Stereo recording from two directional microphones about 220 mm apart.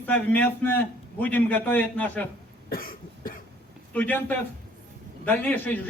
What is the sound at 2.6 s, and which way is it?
Cough, 40° left (ahead or behind).